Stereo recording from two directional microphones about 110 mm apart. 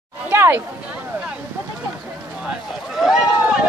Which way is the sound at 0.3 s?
20° right (ahead or behind).